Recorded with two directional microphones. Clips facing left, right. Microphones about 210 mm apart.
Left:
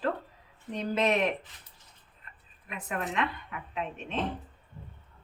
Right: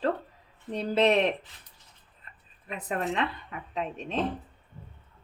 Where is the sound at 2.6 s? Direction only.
35° right (ahead or behind).